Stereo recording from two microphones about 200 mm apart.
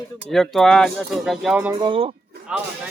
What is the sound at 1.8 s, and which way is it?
Speech, 25° right (ahead or behind).